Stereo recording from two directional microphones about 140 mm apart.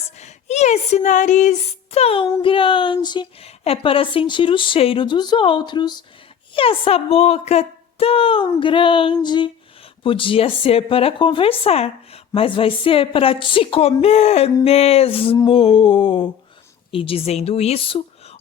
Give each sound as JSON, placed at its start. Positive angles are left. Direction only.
{"t": 0.2, "sound": "female singing", "side_deg": 50}
{"t": 3.4, "sound": "speech", "side_deg": 45}